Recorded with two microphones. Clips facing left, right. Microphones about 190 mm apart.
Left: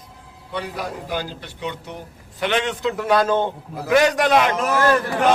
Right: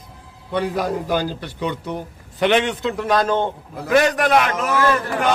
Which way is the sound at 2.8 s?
5° left (ahead or behind).